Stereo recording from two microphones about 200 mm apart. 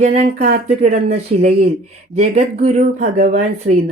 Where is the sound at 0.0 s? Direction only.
35° right (ahead or behind).